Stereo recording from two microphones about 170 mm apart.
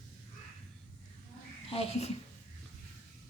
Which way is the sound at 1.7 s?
35° left (ahead or behind).